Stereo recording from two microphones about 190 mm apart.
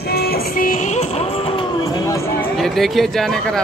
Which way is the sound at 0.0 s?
55° left (ahead or behind).